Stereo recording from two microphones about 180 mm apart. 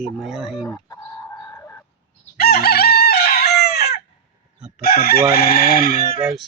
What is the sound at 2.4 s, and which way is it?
Chicken, 60° left (ahead or behind).